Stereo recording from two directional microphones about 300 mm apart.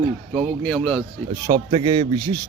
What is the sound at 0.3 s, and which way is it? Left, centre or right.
Speech, centre.